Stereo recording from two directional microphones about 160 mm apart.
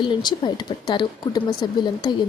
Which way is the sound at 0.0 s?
30° left (ahead or behind).